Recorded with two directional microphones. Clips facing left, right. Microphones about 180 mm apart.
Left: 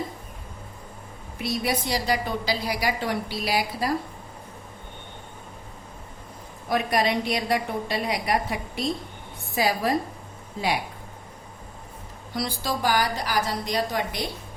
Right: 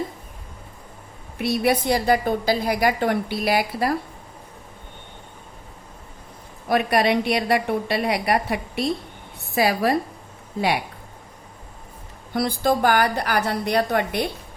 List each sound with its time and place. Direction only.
1.4 s a woman's voice: 60° right (ahead or behind)
6.7 s a woman's voice: 65° right (ahead or behind)
12.3 s a woman's voice: 55° right (ahead or behind)